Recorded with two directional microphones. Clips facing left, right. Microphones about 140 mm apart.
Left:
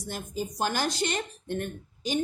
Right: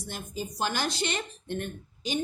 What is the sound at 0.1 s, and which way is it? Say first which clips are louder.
Speech: left 3 dB; 45° left (ahead or behind).